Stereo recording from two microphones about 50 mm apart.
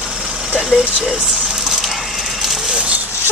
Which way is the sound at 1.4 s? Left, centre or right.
Centre.